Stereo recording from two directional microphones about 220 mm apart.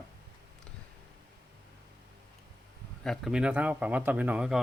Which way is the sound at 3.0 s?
Centre (ahead or behind).